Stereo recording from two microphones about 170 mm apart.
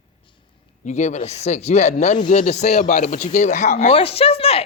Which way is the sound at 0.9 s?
45° left (ahead or behind).